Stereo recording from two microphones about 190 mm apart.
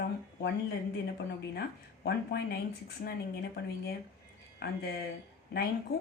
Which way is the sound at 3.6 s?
60° left (ahead or behind).